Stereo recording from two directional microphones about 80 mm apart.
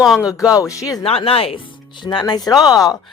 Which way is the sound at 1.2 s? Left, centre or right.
Left.